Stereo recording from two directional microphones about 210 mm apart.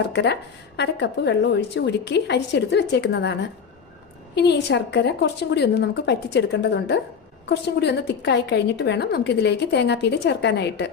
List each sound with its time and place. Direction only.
0.1 s a woman's voice: 55° left (ahead or behind)
4.4 s a woman's voice: 55° left (ahead or behind)